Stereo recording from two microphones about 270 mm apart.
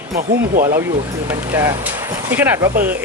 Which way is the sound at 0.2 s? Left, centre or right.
Right.